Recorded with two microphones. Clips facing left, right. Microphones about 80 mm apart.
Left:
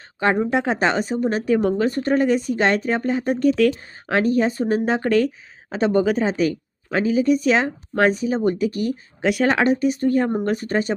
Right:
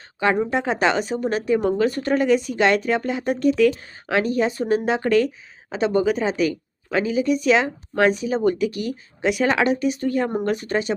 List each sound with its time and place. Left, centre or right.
0.2 s speech: left